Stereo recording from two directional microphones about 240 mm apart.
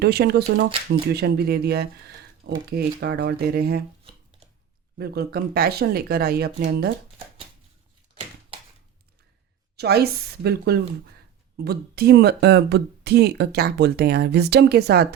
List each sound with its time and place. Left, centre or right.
0.0 s speech: right
4.9 s speech: right
9.7 s speech: right